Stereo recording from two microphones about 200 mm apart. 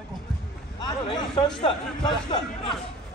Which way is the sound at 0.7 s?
20° left (ahead or behind).